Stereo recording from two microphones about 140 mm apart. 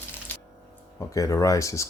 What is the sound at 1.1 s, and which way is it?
Speech, 25° left (ahead or behind).